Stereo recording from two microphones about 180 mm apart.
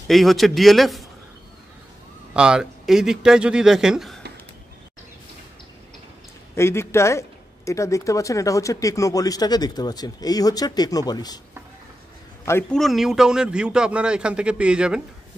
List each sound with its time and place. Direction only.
0.1 s a man's voice: centre (ahead or behind)
2.3 s a man's voice: 5° right (ahead or behind)
6.5 s speech: 15° left (ahead or behind)
12.7 s a man's voice: centre (ahead or behind)